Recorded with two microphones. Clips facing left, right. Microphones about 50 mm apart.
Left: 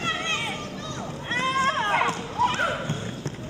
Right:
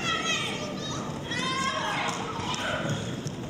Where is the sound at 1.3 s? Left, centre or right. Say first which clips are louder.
Left 7 dB; left.